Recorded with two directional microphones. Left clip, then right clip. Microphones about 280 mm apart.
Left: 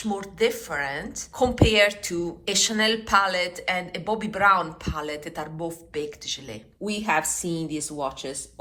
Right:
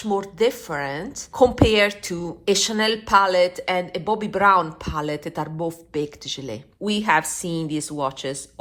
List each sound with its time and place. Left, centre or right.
0.0 s a woman's voice: centre
6.8 s speech: right